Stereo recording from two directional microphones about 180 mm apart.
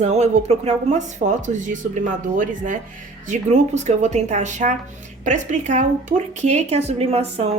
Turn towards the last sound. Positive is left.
turn(degrees=-35)  # may be behind; listen again after turning